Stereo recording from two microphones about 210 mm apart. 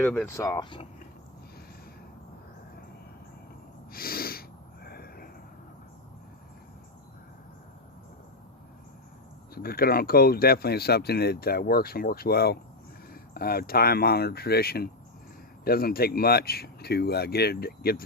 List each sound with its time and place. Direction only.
0.0 s speech: 5° left (ahead or behind); by 0.9 s 20° left (ahead or behind)
3.9 s snort: 45° left (ahead or behind)
9.6 s speech: 45° left (ahead or behind)